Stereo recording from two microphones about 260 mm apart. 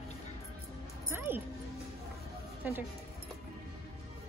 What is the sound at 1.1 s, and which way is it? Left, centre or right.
Music, centre.